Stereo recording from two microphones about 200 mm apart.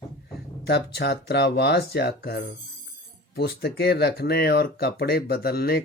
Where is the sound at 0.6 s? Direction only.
55° left (ahead or behind).